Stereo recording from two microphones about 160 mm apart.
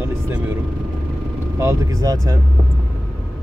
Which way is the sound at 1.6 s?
20° right (ahead or behind).